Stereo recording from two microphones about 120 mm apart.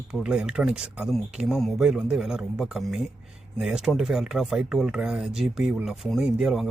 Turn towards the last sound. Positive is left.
turn(degrees=-5)  # may be behind; listen again after turning